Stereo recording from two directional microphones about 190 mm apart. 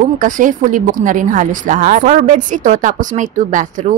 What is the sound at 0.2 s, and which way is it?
Speech, 45° right (ahead or behind).